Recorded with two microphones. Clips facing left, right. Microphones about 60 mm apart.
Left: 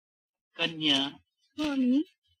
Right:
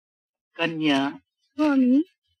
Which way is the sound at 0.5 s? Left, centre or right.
Right.